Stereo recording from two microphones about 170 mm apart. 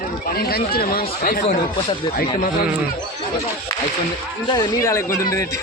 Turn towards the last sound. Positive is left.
turn(degrees=15)  # may be behind; listen again after turning